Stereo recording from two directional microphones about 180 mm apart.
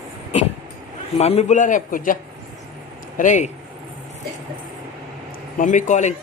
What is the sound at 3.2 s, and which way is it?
Speech, 40° left (ahead or behind).